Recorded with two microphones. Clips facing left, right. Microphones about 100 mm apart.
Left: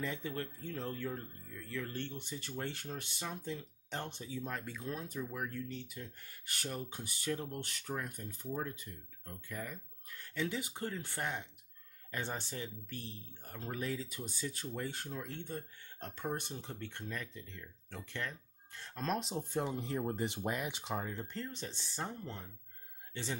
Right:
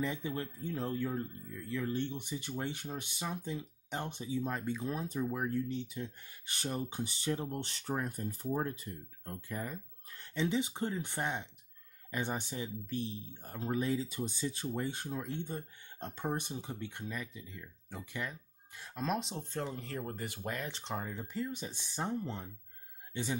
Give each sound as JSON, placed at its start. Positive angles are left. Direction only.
{"t": 0.0, "sound": "speech", "side_deg": -15}
{"t": 19.5, "sound": "speech", "side_deg": 15}
{"t": 20.8, "sound": "speech", "side_deg": 0}